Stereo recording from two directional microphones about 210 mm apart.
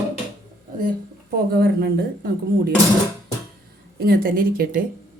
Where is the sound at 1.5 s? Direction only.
50° right (ahead or behind).